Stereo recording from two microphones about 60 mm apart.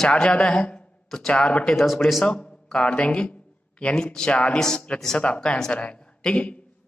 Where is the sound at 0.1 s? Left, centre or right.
Centre.